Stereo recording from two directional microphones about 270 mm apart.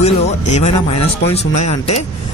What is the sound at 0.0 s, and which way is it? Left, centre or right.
Speech, left.